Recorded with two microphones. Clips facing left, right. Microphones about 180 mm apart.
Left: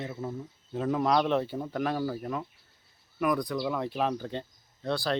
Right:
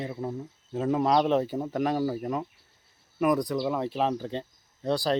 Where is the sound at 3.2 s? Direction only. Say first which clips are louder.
Right 4 dB; 40° right (ahead or behind).